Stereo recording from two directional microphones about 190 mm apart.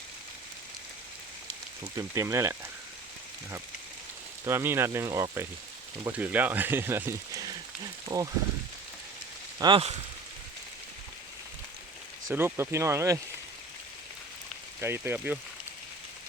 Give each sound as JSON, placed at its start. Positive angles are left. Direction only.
{"t": 1.8, "sound": "speech", "side_deg": -15}
{"t": 4.4, "sound": "speech", "side_deg": -15}
{"t": 9.6, "sound": "speech", "side_deg": -25}
{"t": 12.3, "sound": "speech", "side_deg": -10}
{"t": 14.8, "sound": "speech", "side_deg": -10}